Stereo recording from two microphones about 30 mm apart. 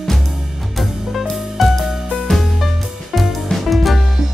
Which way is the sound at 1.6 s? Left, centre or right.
Centre.